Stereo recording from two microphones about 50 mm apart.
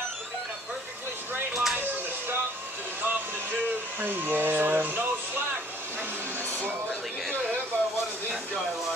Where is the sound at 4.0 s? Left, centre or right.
Right.